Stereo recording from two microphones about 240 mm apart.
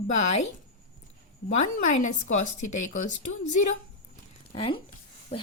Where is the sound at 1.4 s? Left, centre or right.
Left.